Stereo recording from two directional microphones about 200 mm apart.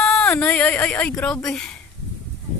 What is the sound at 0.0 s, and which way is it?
Speech, 5° left (ahead or behind).